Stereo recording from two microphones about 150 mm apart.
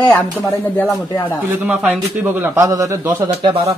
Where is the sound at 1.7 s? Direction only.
5° right (ahead or behind).